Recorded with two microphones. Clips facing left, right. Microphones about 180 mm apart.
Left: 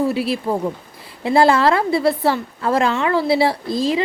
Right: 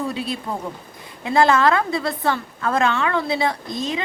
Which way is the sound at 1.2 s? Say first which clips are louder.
Left 2 dB; 30° left (ahead or behind).